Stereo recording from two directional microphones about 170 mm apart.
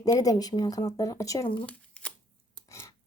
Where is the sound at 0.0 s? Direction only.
20° left (ahead or behind).